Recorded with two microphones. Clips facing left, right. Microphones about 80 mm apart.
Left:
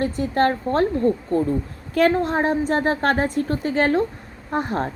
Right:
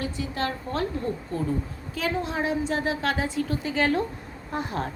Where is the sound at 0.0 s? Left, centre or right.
Left.